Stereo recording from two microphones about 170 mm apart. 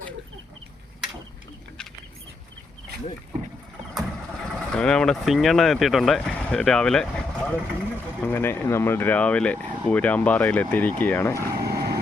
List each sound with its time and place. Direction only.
3.9 s speech: centre (ahead or behind)
11.6 s vehicle: 65° right (ahead or behind)